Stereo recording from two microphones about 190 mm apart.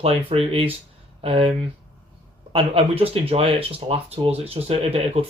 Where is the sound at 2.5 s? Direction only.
30° right (ahead or behind).